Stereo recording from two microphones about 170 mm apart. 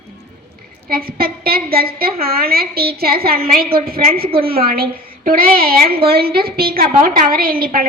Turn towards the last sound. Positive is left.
turn(degrees=-55)  # may be behind; listen again after turning